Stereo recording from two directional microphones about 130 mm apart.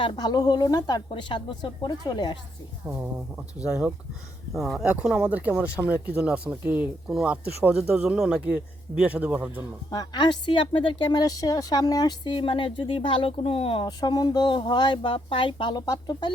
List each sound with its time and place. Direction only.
0.0 s a woman's voice: 35° left (ahead or behind)
2.8 s speech: 10° right (ahead or behind)
9.9 s a woman's voice: 30° left (ahead or behind)